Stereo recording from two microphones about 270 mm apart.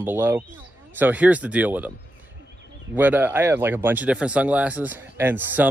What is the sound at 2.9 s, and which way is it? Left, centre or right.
Speech, centre.